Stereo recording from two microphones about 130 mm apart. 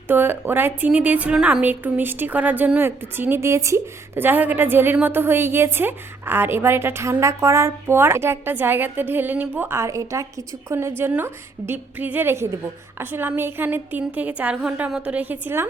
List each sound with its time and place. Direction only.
0.1 s a woman's voice: 15° right (ahead or behind)